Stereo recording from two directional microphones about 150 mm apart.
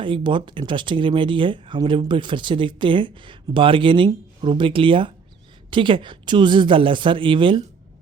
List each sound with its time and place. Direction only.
0.0 s speech: 35° right (ahead or behind)